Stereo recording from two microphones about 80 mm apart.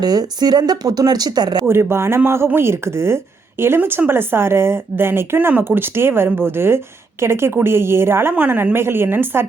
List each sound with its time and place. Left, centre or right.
0.0 s speech: right
1.6 s a woman's voice: right